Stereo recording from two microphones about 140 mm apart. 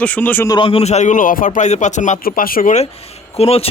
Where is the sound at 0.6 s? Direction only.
40° left (ahead or behind); by 2.7 s 90° left.